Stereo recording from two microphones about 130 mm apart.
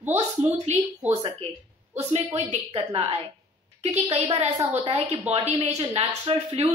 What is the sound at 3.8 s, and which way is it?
Speech, 55° right (ahead or behind).